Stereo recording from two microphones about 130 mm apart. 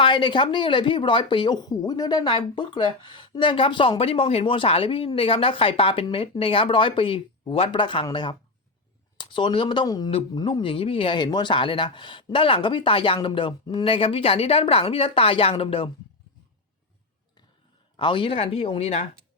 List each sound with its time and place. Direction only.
0.0 s speech: 35° left (ahead or behind)
17.9 s speech: 40° left (ahead or behind)